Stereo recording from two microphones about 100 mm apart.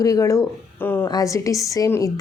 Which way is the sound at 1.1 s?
35° left (ahead or behind).